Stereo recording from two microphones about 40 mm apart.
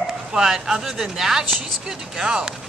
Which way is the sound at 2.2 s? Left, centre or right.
Right.